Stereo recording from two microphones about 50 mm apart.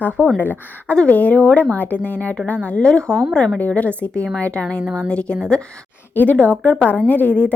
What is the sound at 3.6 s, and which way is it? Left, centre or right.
Speech, left.